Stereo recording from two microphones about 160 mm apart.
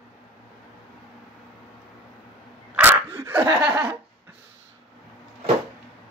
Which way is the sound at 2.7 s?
10° right (ahead or behind).